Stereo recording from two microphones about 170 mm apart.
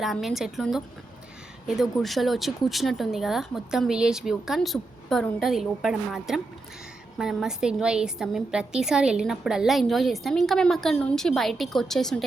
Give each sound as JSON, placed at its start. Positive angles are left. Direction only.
{"t": 0.0, "sound": "a woman's voice", "side_deg": 0}